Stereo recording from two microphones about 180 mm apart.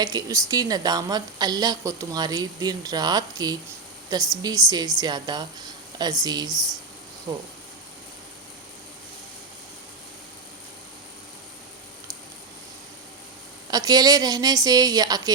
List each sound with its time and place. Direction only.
0.0 s a woman's voice: 20° right (ahead or behind)
13.7 s a woman's voice: 20° right (ahead or behind)